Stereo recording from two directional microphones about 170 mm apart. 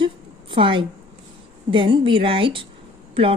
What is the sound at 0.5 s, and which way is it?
A woman's voice, 30° right (ahead or behind).